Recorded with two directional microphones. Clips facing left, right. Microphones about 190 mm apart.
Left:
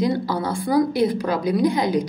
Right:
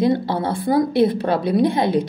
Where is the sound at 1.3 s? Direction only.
30° right (ahead or behind).